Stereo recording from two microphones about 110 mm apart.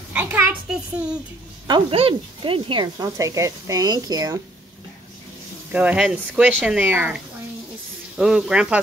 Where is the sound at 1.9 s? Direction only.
55° right (ahead or behind).